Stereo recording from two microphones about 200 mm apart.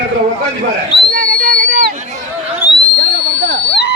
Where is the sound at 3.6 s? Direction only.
60° left (ahead or behind).